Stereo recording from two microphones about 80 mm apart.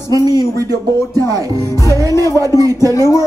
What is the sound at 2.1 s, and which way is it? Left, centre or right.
Speech, left.